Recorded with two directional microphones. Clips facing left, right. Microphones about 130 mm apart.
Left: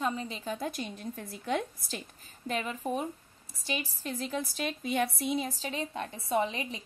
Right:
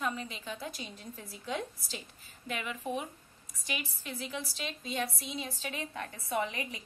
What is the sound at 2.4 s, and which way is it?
A woman's voice, 35° left (ahead or behind).